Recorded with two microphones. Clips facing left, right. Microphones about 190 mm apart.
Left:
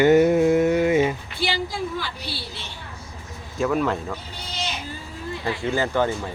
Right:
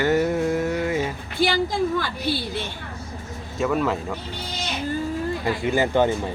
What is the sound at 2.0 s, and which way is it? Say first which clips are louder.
Speech: right 7 dB; 50° right (ahead or behind).